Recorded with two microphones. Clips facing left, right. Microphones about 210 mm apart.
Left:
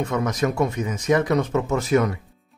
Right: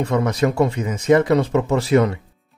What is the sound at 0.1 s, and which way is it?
A man's voice, 30° right (ahead or behind).